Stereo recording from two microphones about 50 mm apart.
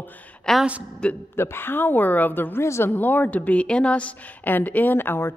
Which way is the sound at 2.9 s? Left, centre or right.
Left.